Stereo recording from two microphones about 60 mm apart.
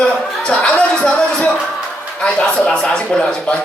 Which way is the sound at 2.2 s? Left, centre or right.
Centre.